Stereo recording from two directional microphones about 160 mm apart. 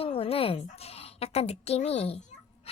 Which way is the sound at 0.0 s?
35° left (ahead or behind).